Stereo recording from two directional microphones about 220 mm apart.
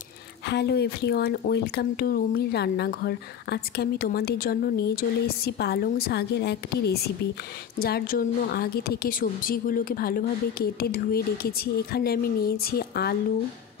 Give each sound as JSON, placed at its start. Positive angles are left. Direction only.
{"t": 0.5, "sound": "speech", "side_deg": 50}